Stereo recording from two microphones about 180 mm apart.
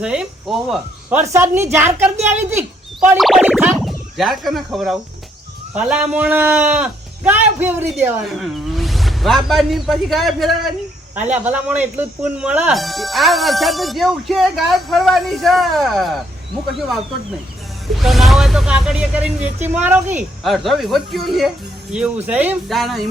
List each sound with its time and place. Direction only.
0.0 s speech: 5° right (ahead or behind)
1.2 s a man's voice: 15° right (ahead or behind)
3.2 s music: centre (ahead or behind)
3.8 s a man's voice: centre (ahead or behind)
8.2 s a man's voice: centre (ahead or behind)